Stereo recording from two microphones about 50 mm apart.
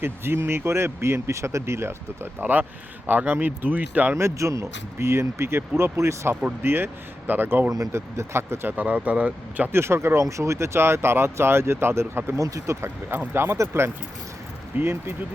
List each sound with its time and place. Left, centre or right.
0.0 s speech: right
1.0 s speech: right
2.4 s speech: right
4.1 s speech: right
6.6 s speech: right
7.9 s speech: right
8.6 s speech: right
9.7 s speech: right
12.4 s speech: right
13.3 s speech: right
14.7 s speech: right